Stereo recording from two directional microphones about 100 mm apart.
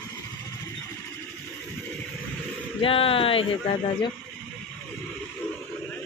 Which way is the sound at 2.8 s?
70° left (ahead or behind).